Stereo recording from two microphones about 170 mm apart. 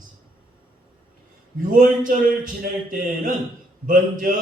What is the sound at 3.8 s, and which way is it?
Mantra, 55° right (ahead or behind).